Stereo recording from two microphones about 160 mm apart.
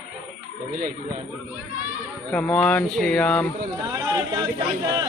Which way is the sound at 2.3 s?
5° left (ahead or behind).